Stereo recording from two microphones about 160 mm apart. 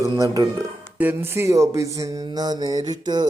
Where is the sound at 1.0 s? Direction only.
10° right (ahead or behind).